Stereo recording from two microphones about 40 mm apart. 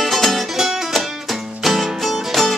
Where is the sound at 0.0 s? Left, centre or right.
Centre.